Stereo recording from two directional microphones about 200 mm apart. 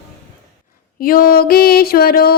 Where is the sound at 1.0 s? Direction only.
45° left (ahead or behind).